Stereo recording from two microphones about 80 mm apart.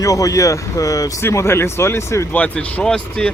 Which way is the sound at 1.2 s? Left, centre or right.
Left.